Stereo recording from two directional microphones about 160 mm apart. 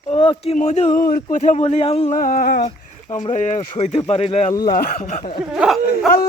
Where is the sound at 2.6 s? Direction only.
50° left (ahead or behind).